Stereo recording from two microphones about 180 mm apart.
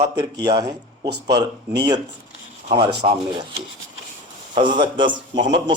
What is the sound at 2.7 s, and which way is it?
Speech, 35° right (ahead or behind).